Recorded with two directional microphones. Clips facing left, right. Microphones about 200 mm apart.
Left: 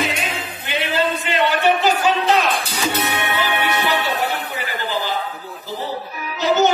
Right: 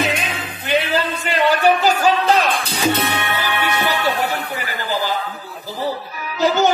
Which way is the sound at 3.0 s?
20° left (ahead or behind).